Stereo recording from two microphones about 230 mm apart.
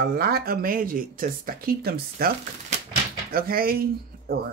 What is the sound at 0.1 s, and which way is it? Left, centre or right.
Speech, right.